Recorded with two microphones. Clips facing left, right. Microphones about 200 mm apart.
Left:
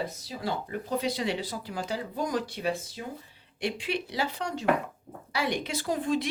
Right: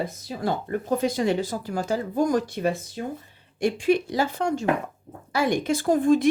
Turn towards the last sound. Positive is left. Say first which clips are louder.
# right 8 dB
turn(degrees=-50)  # may be behind; listen again after turning